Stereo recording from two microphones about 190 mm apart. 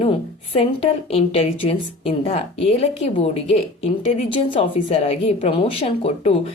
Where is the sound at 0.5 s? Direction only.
30° left (ahead or behind).